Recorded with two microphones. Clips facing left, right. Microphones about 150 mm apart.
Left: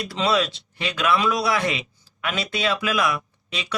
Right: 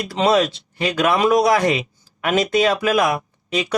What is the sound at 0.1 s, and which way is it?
Speech, 45° right (ahead or behind).